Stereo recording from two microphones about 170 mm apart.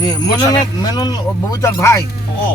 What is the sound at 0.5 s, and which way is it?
Speech, 20° left (ahead or behind).